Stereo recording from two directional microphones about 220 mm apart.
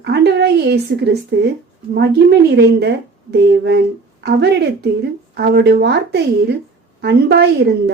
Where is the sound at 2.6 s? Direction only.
50° right (ahead or behind).